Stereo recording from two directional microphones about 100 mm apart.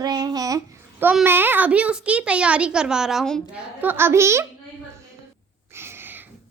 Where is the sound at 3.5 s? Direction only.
20° right (ahead or behind).